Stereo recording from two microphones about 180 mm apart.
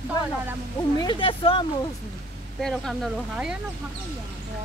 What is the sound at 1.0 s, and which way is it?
Speech, 30° left (ahead or behind).